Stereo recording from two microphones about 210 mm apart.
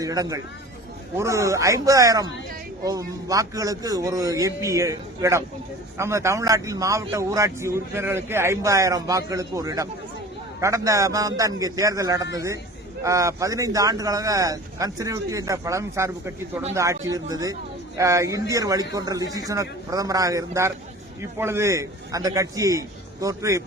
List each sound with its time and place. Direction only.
0.0 s speech: 15° right (ahead or behind)